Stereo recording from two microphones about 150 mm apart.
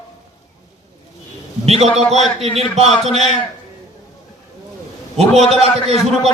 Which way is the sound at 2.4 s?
45° right (ahead or behind).